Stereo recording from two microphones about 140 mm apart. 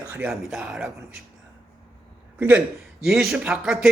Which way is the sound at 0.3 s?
5° right (ahead or behind).